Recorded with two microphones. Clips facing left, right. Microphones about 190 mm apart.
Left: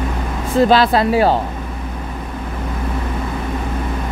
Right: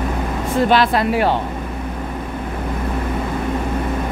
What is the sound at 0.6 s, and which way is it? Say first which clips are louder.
Speech: left 3 dB; 35° left (ahead or behind).